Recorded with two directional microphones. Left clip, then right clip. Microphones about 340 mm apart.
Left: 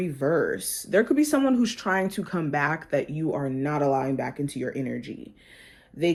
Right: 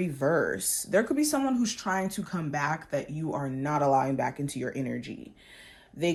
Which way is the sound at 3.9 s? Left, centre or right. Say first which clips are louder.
Even; right.